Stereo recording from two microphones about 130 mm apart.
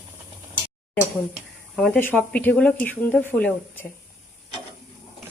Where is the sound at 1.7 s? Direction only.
5° left (ahead or behind).